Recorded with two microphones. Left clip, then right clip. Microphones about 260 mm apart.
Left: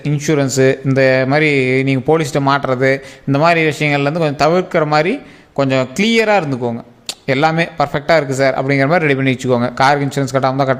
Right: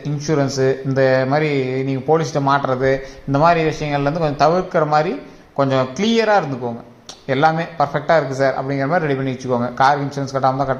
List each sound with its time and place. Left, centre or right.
0.0 s speech: left